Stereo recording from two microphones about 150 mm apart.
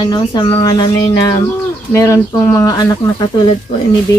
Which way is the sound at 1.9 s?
20° left (ahead or behind).